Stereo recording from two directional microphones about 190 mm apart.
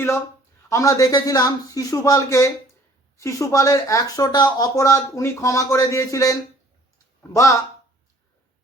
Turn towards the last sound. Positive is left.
turn(degrees=15)  # may be behind; listen again after turning